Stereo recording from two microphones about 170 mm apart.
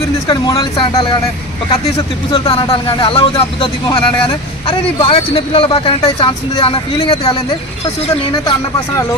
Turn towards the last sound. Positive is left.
turn(degrees=30)  # may be behind; listen again after turning